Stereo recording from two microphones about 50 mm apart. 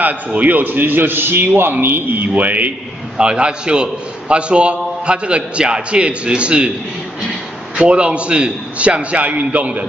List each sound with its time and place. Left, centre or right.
0.0 s a man's voice: right
2.1 s a man's voice: right
3.2 s a man's voice: centre
7.7 s a man's voice: right